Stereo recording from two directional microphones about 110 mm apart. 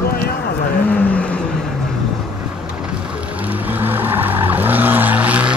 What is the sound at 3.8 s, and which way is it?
Vehicle, 20° right (ahead or behind).